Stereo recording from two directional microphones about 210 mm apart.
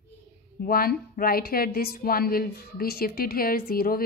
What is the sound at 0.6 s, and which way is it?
A woman's voice, 45° left (ahead or behind).